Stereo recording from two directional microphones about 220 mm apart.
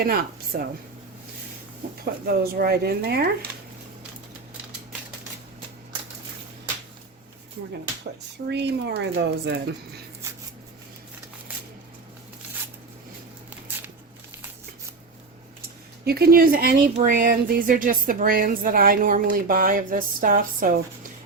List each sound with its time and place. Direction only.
0.0 s speech: 45° right (ahead or behind)
2.2 s speech: 45° right (ahead or behind)
8.4 s speech: 50° right (ahead or behind)
16.0 s a woman's voice: 45° right (ahead or behind)